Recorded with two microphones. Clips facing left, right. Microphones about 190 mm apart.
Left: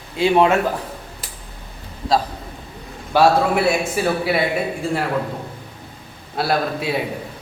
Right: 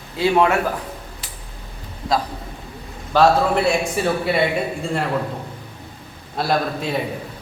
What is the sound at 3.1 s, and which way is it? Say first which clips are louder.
A man's voice: even; 5° left (ahead or behind).